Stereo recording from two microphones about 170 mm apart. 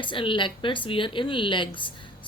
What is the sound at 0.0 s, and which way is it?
Speech, 30° left (ahead or behind).